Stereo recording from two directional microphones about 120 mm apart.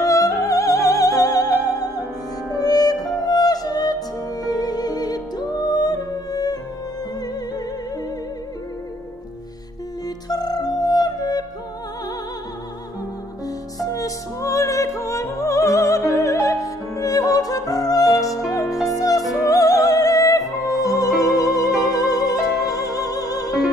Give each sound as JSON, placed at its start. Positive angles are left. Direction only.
{"t": 0.0, "sound": "music", "side_deg": 25}
{"t": 10.0, "sound": "music", "side_deg": 35}
{"t": 13.7, "sound": "music", "side_deg": 30}
{"t": 19.4, "sound": "opera", "side_deg": 30}
{"t": 20.6, "sound": "music", "side_deg": 30}